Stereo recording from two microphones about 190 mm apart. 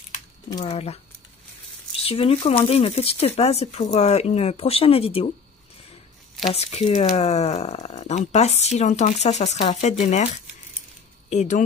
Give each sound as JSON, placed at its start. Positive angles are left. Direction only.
{"t": 0.7, "sound": "speech", "side_deg": 35}
{"t": 2.0, "sound": "speech", "side_deg": 30}
{"t": 6.5, "sound": "speech", "side_deg": 35}